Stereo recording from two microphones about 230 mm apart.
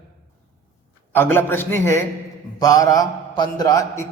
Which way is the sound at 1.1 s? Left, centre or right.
Centre.